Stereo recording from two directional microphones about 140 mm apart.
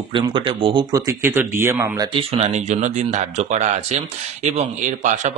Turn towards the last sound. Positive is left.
turn(degrees=-60)  # may be behind; listen again after turning